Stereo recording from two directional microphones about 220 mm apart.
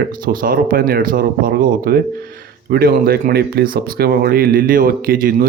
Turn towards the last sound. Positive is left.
turn(degrees=-40)  # may be behind; listen again after turning